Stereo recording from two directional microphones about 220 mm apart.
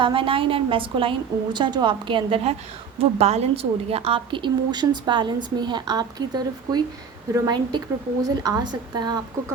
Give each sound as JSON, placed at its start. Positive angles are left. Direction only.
{"t": 0.0, "sound": "a woman's voice", "side_deg": -25}